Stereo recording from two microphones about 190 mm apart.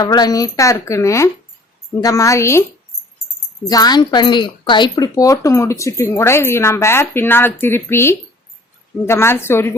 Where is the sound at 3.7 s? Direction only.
20° left (ahead or behind).